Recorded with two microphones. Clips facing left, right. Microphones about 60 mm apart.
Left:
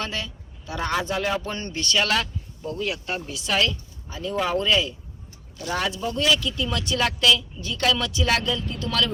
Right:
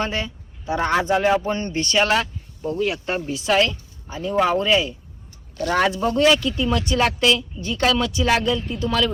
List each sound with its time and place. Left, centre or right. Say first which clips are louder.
0.0 s a man's voice: right 5 dB; right
5.5 s speech: right 7 dB; right
5.9 s speech: right 7 dB; right
6.1 s a man's voice: right 5 dB; right; by 9.0 s centre